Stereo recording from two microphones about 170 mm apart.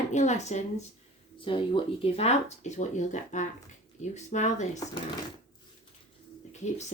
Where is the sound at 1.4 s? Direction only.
30° left (ahead or behind).